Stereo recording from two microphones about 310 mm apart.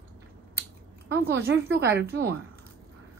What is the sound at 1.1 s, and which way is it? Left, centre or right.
Speech, right.